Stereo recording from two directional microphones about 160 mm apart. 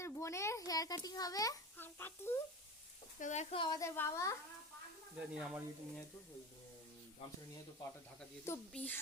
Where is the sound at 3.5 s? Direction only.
30° left (ahead or behind).